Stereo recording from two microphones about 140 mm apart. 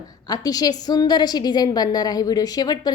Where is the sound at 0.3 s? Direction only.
30° left (ahead or behind).